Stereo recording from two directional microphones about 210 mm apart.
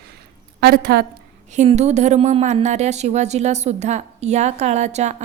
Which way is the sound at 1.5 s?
35° right (ahead or behind).